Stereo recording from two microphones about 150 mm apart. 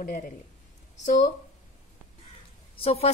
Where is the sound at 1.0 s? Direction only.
55° left (ahead or behind).